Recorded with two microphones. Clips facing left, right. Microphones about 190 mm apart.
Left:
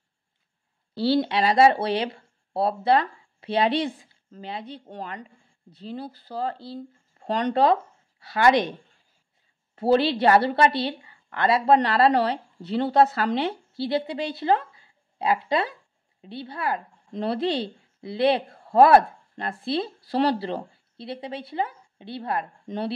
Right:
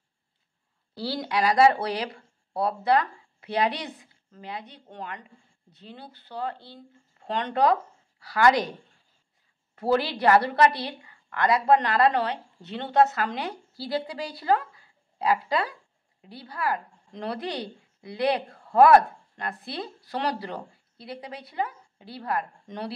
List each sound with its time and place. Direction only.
0.9 s a woman's voice: 25° left (ahead or behind)
9.8 s a woman's voice: 25° left (ahead or behind)